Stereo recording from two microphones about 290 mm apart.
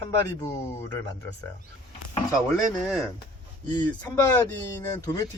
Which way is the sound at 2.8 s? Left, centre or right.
Centre.